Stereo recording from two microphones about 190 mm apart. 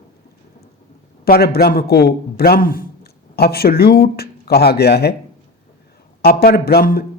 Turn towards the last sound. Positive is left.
turn(degrees=55)  # may be behind; listen again after turning